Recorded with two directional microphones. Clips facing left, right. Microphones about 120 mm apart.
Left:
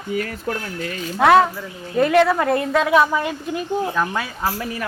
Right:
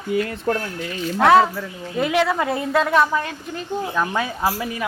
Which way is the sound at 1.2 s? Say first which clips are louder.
Even; centre (ahead or behind).